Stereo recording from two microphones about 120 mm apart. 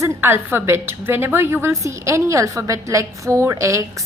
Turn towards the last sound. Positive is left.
turn(degrees=-25)  # may be behind; listen again after turning